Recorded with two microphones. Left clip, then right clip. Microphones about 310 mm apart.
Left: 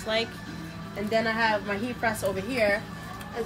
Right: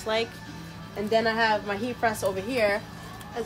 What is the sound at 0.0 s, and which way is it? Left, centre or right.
Speech, centre.